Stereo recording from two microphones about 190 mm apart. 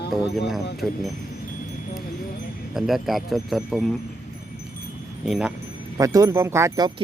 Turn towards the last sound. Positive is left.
turn(degrees=-20)  # may be behind; listen again after turning